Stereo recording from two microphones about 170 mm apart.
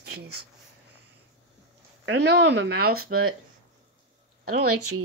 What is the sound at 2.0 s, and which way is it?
Speech, 90° right.